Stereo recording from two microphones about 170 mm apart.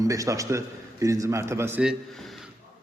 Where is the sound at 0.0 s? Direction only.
20° right (ahead or behind).